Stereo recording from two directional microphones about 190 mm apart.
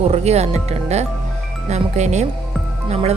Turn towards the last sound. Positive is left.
turn(degrees=-35)  # may be behind; listen again after turning